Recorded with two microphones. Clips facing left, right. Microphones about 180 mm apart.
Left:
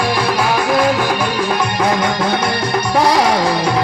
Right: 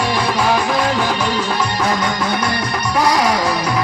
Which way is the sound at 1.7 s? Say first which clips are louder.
Left 3 dB; 25° left (ahead or behind).